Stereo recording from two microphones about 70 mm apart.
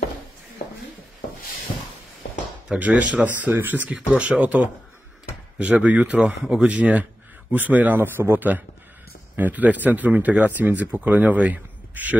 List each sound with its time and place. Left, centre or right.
2.7 s speech: centre